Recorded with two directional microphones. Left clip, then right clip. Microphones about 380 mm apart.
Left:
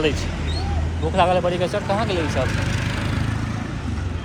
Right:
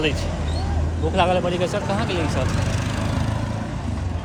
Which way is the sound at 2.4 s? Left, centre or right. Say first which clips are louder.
Left 2 dB; right.